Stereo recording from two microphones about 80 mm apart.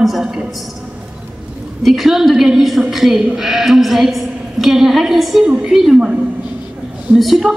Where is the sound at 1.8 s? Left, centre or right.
Centre.